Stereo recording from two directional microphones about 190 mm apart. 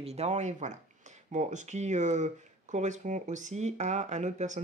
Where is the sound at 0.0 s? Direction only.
35° right (ahead or behind).